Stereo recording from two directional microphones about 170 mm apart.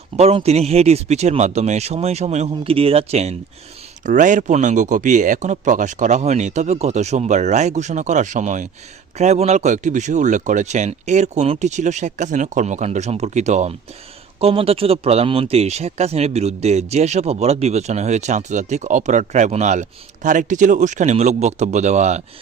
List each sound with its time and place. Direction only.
0.2 s speech: 40° right (ahead or behind)